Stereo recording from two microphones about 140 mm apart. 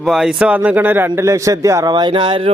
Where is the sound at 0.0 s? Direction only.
5° right (ahead or behind).